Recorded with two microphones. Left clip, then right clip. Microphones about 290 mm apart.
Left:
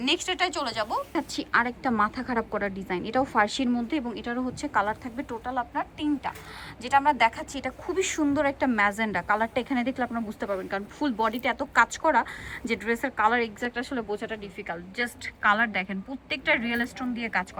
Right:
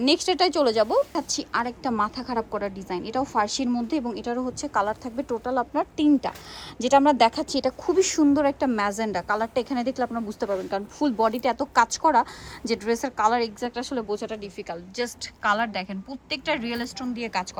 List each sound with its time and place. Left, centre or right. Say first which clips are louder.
0.0 s speech: right 5 dB; centre
1.1 s speech: left 1 dB; centre